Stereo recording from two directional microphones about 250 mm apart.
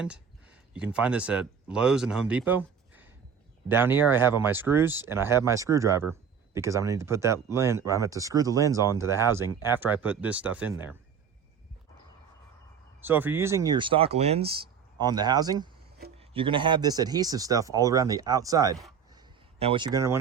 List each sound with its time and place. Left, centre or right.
0.7 s speech: centre
9.0 s speech: centre
9.3 s speech: centre
13.1 s speech: centre
19.1 s a sound: right